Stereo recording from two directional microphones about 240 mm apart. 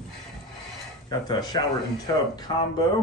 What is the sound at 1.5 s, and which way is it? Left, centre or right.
Speech, centre.